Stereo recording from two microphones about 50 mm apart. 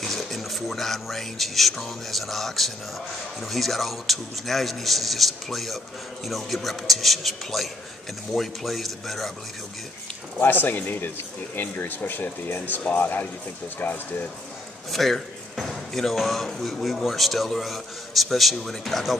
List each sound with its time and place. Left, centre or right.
0.0 s a man's voice: centre
10.4 s speech: left
14.9 s a man's voice: centre